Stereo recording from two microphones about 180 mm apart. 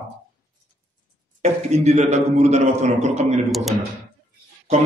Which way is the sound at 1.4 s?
35° right (ahead or behind).